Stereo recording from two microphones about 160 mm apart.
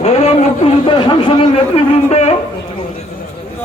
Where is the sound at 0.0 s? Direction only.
40° left (ahead or behind).